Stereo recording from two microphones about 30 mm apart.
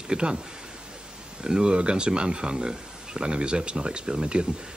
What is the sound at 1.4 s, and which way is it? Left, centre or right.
Speech, right.